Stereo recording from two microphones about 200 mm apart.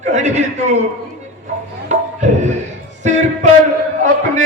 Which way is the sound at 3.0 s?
35° right (ahead or behind).